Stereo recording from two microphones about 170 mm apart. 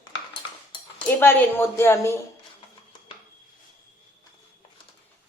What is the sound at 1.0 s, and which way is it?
Speech, 10° left (ahead or behind).